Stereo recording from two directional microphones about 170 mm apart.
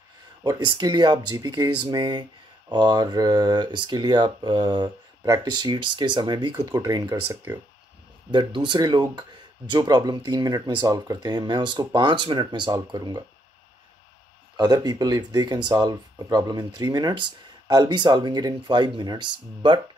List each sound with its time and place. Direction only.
0.4 s speech: 25° right (ahead or behind)
8.3 s speech: 30° right (ahead or behind)
14.6 s speech: 25° right (ahead or behind)